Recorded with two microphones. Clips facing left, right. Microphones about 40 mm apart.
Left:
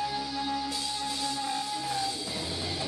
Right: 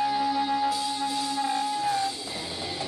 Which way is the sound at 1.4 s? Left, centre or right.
Centre.